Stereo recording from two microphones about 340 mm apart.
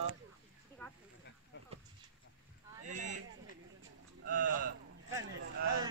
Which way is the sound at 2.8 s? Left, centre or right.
Right.